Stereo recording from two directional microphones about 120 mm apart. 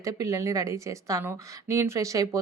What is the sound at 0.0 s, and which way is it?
A woman's voice, 25° right (ahead or behind).